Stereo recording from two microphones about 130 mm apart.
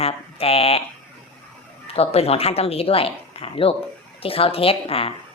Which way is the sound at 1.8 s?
50° left (ahead or behind).